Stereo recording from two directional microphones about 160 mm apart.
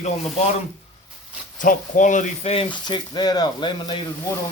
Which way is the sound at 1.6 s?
55° left (ahead or behind).